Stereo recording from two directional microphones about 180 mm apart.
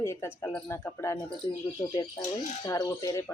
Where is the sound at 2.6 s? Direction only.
20° left (ahead or behind).